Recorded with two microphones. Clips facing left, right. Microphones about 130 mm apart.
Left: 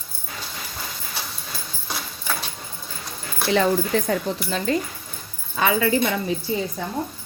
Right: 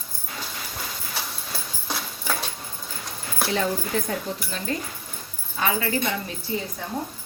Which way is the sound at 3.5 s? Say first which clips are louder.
Left 7 dB; 90° left.